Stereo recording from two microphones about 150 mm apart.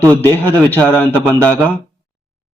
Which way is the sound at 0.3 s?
15° left (ahead or behind).